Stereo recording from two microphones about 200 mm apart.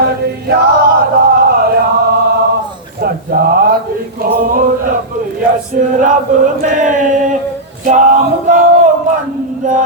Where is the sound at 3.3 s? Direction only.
45° right (ahead or behind).